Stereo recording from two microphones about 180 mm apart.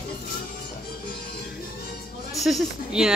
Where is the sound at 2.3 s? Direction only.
Centre (ahead or behind).